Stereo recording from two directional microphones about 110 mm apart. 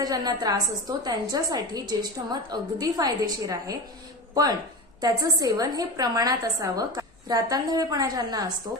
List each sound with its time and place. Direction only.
0.0 s a woman's voice: 35° right (ahead or behind)
4.9 s a woman's voice: 35° right (ahead or behind)